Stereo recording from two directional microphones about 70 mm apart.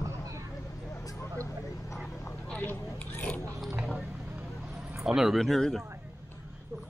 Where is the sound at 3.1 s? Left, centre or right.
Left.